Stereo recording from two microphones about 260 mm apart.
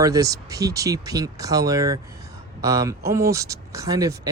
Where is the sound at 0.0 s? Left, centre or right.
Centre.